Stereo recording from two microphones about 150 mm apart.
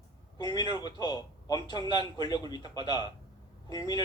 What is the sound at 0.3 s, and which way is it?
A man's voice, 30° left (ahead or behind).